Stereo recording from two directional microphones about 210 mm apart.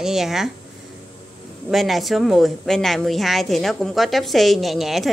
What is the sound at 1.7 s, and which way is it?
Speech, centre (ahead or behind).